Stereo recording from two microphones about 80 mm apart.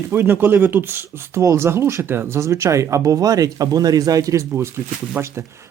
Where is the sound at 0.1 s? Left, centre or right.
Right.